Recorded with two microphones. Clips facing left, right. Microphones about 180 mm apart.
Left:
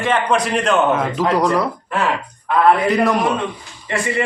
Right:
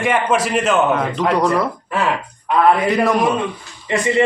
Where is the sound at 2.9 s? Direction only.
Centre (ahead or behind).